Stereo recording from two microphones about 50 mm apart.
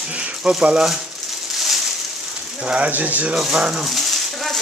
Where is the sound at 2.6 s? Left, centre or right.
Right.